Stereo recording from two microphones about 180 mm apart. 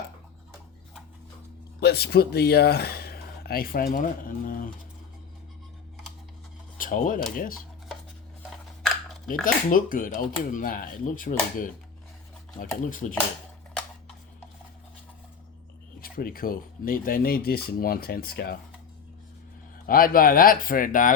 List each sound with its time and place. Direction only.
1.8 s speech: 65° left (ahead or behind); by 4.7 s 50° left (ahead or behind)
6.7 s speech: 50° left (ahead or behind)
9.4 s speech: 50° left (ahead or behind)
16.0 s speech: 55° left (ahead or behind)
19.9 s speech: 50° left (ahead or behind)